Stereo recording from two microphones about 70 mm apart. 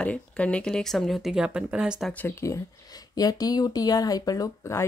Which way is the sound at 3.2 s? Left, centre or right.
Left.